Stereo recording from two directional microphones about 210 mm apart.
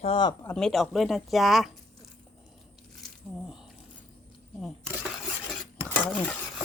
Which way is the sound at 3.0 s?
5° right (ahead or behind).